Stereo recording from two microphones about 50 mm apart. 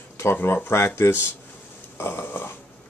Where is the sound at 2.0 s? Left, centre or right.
Left.